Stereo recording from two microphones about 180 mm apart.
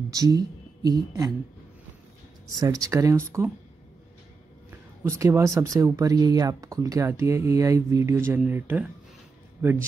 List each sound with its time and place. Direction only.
0.1 s speech: 20° right (ahead or behind)
2.5 s speech: 20° right (ahead or behind)
5.0 s speech: 15° right (ahead or behind)